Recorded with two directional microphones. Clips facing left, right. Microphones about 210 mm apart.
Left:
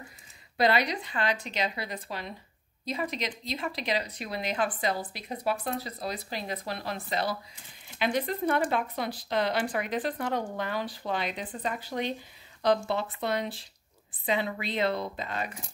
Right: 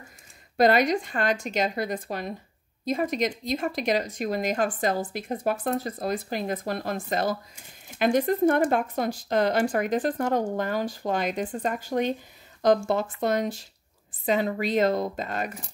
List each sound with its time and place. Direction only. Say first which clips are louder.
0.6 s speech: right 6 dB; 45° right (ahead or behind)